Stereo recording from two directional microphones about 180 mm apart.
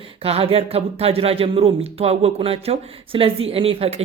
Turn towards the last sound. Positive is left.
turn(degrees=-35)  # may be behind; listen again after turning